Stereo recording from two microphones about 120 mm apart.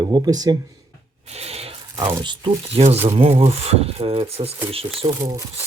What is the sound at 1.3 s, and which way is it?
Rub, 60° right (ahead or behind).